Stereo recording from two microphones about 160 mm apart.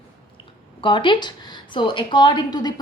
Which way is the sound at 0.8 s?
30° left (ahead or behind).